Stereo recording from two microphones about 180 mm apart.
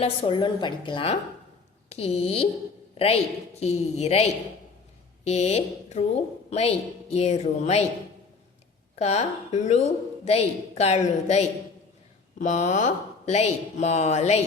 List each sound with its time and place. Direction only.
0.0 s a woman's voice: 30° left (ahead or behind)
3.6 s a woman's voice: 35° left (ahead or behind)
9.0 s a woman's voice: 35° left (ahead or behind)